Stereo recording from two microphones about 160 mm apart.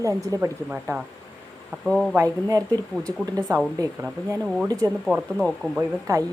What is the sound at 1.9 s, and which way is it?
Speech, 5° left (ahead or behind).